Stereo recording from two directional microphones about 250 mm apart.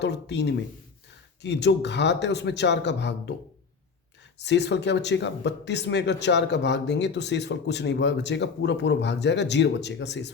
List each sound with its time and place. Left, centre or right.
0.0 s speech: left
4.4 s speech: left